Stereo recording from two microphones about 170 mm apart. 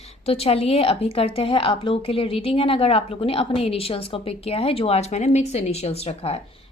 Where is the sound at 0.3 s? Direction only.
35° left (ahead or behind).